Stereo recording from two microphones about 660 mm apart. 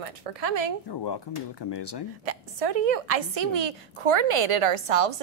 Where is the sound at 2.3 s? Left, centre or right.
Right.